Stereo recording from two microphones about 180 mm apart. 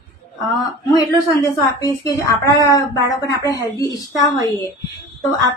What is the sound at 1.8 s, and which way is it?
A woman's voice, 15° left (ahead or behind).